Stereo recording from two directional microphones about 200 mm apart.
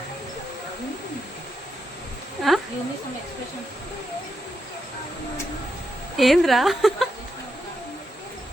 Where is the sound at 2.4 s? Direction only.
Centre (ahead or behind).